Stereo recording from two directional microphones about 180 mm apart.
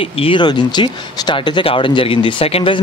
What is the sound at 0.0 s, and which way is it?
Speech, 30° left (ahead or behind).